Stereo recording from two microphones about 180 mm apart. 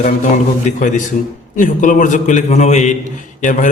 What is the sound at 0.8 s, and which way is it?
A man's voice, 45° left (ahead or behind).